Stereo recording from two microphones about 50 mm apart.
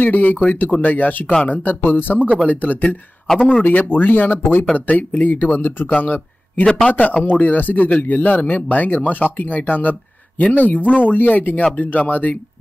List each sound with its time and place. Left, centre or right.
0.0 s speech: left
1.7 s speech: left
6.6 s a man's voice: centre
6.9 s speech: left